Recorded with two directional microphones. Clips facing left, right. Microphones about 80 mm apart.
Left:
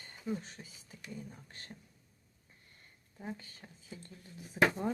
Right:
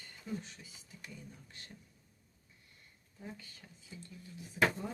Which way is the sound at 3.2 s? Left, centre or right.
Left.